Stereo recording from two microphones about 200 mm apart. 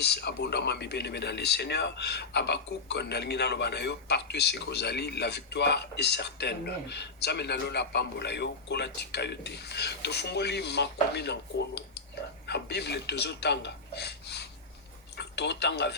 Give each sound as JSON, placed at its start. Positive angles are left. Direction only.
{"t": 0.0, "sound": "speech", "side_deg": 55}